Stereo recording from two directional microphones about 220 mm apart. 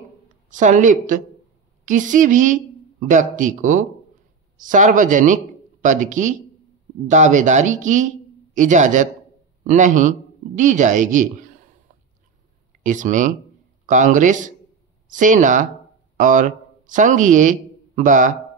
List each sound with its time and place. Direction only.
0.5 s speech: 35° right (ahead or behind)
12.8 s speech: 35° right (ahead or behind)